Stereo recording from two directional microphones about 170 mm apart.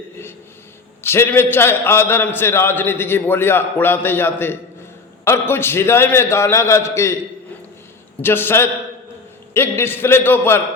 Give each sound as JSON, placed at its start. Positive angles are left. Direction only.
{"t": 1.0, "sound": "a man's voice", "side_deg": 15}
{"t": 8.2, "sound": "a man's voice", "side_deg": 15}